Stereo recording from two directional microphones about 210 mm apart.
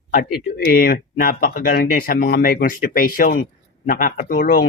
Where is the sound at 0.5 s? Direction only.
45° left (ahead or behind).